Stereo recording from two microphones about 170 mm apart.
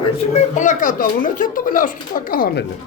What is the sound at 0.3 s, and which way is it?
Speech, 45° left (ahead or behind).